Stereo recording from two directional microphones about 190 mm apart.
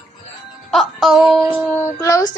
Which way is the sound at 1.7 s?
15° left (ahead or behind).